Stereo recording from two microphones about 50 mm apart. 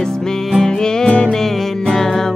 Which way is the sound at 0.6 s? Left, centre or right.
Centre.